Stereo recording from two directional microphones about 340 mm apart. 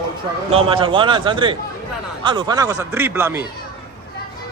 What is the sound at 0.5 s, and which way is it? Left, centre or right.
A man's voice, centre.